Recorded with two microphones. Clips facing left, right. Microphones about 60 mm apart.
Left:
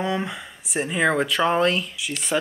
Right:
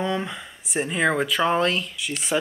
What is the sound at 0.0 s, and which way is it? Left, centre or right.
Speech, centre.